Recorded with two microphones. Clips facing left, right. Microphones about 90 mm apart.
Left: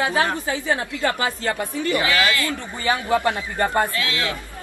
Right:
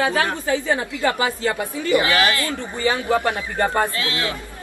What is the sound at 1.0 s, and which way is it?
A woman's voice, 20° right (ahead or behind).